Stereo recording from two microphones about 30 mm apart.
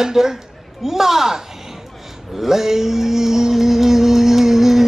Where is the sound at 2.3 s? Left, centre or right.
Centre.